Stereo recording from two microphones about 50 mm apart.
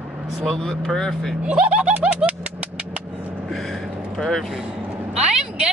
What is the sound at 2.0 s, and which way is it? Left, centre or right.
Vehicle, centre.